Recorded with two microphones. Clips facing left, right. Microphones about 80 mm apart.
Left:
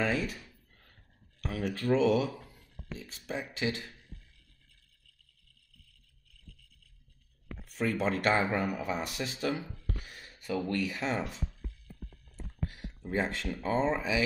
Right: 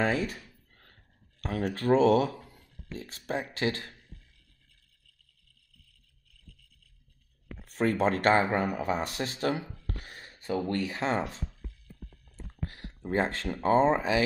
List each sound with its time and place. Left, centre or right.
0.0 s speech: right
1.4 s speech: right
2.5 s a sound: right
3.5 s a man's voice: right
7.6 s speech: right
9.8 s a sound: right
10.7 s speech: right
13.1 s speech: right